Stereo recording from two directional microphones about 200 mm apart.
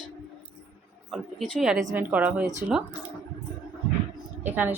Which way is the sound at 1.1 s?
Centre (ahead or behind).